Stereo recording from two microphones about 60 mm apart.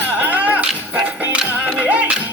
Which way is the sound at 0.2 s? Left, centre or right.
Right.